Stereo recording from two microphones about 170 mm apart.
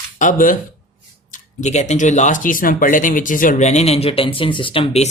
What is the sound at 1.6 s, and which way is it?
Speech, 45° left (ahead or behind).